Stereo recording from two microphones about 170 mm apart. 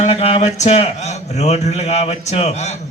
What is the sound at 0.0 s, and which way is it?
A man's voice, 35° left (ahead or behind).